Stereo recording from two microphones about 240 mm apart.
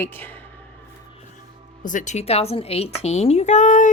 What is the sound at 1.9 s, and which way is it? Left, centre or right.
Speech, left.